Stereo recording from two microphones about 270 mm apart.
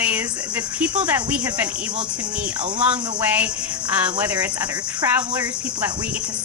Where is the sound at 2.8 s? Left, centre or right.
Centre.